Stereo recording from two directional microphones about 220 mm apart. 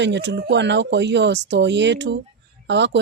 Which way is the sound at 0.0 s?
55° right (ahead or behind).